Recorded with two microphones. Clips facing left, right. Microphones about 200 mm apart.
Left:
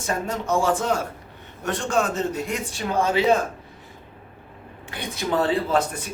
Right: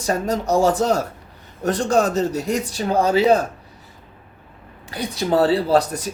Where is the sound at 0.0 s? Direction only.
40° right (ahead or behind).